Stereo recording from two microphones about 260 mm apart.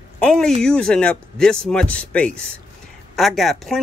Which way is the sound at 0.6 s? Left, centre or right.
Centre.